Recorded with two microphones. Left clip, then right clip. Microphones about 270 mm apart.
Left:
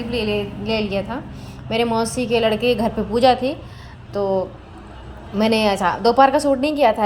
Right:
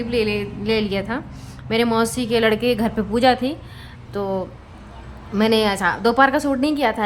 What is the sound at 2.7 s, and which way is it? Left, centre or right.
Speech, right.